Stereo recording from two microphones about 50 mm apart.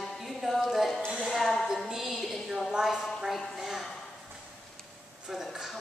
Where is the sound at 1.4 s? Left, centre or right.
Centre.